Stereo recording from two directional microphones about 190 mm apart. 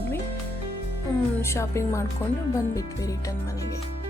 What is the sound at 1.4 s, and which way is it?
Speech, 15° left (ahead or behind).